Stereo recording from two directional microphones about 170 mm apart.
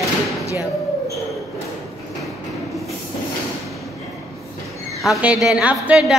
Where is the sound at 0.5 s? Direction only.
20° left (ahead or behind).